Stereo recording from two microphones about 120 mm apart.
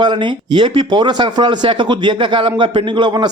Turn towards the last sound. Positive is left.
turn(degrees=-40)  # may be behind; listen again after turning